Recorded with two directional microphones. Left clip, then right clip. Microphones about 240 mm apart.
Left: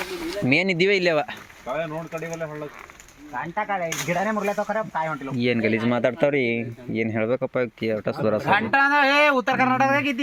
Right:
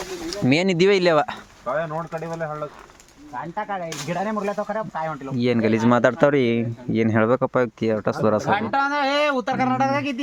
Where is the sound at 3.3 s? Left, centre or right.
Centre.